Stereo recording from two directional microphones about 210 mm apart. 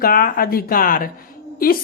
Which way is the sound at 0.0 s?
45° left (ahead or behind).